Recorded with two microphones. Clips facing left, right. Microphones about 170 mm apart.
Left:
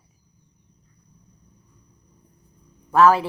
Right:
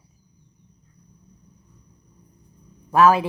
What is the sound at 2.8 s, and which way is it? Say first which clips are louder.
Speech: even; 15° right (ahead or behind).